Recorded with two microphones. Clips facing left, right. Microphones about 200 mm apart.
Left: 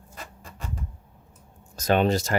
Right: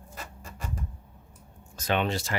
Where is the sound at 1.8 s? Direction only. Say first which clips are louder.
Left 6 dB; 40° left (ahead or behind).